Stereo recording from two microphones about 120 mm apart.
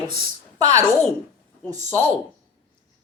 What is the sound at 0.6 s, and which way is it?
A woman's voice, 30° right (ahead or behind).